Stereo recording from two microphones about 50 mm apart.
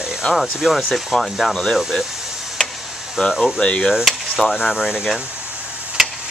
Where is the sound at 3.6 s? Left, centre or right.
Left.